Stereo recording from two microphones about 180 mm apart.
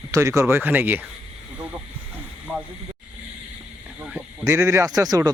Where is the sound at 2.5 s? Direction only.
5° right (ahead or behind).